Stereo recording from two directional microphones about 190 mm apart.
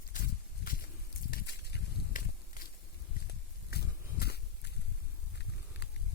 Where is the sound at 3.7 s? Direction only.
55° left (ahead or behind).